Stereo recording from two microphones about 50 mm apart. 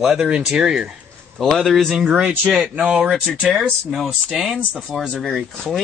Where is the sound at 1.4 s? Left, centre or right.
Centre.